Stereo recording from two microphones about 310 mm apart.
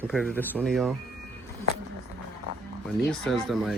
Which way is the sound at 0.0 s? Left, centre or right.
Centre.